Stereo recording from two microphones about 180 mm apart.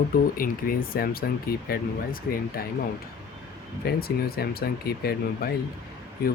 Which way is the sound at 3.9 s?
60° left (ahead or behind).